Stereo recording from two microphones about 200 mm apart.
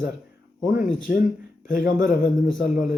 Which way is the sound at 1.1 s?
50° left (ahead or behind).